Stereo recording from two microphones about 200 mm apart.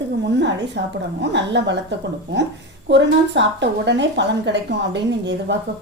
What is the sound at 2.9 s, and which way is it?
A woman's voice, 60° right (ahead or behind).